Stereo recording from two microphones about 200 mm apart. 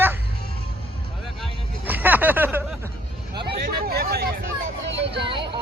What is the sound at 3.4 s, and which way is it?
Hubbub, 50° right (ahead or behind).